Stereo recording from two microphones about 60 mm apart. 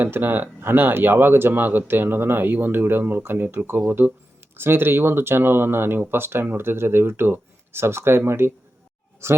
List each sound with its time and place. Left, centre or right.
0.0 s speech: right